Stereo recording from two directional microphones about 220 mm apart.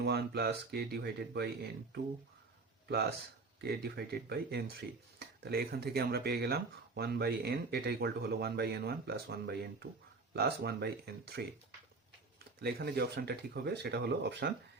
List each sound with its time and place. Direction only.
0.0 s speech: 45° right (ahead or behind)
3.6 s speech: 45° right (ahead or behind)
12.6 s speech: 45° right (ahead or behind)